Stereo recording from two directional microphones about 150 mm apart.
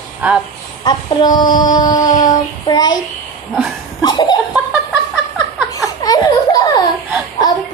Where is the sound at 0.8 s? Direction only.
30° left (ahead or behind).